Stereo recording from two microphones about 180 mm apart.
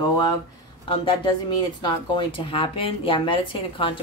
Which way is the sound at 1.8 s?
25° left (ahead or behind).